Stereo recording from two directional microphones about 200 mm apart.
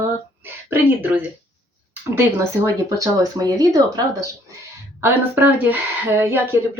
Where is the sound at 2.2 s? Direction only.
15° right (ahead or behind).